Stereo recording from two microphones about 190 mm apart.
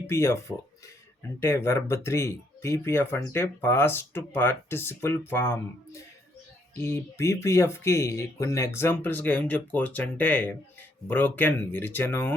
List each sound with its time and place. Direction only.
0.1 s speech: 15° left (ahead or behind)